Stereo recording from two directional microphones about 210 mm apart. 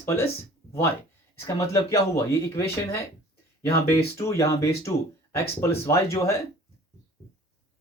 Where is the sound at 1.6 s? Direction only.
15° left (ahead or behind).